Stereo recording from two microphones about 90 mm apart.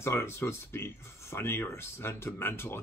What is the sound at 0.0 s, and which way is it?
Speech, 30° left (ahead or behind).